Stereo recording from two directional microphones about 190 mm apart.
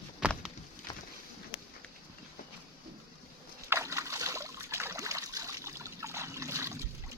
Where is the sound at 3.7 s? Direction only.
15° right (ahead or behind).